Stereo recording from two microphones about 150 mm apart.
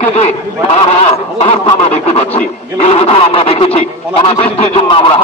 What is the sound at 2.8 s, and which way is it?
A man's voice, 45° left (ahead or behind).